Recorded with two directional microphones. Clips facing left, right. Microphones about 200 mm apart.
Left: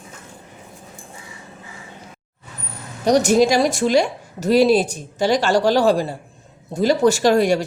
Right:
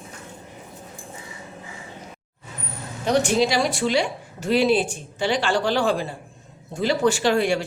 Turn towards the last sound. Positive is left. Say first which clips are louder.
# left 5 dB
turn(degrees=40)  # may be behind; listen again after turning